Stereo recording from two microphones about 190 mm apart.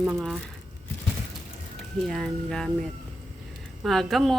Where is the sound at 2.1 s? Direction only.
Centre (ahead or behind).